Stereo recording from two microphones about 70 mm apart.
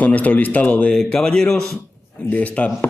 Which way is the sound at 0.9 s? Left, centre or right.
Centre.